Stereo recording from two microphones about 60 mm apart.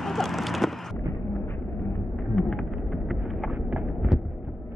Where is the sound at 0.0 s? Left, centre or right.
Centre.